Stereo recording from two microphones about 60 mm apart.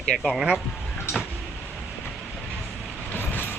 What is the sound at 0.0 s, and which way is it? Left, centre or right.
Speech, centre.